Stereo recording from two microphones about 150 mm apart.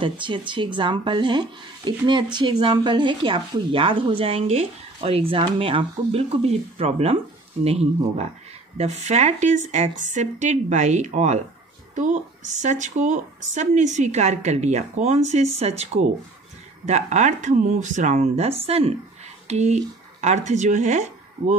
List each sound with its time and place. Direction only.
0.0 s a woman's voice: 35° right (ahead or behind); by 21.5 s 50° right (ahead or behind)